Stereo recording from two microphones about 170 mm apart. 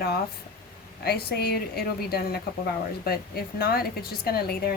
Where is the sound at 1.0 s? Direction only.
65° left (ahead or behind).